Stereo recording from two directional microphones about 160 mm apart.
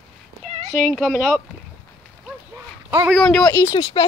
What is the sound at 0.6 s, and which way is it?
Speech, 55° right (ahead or behind).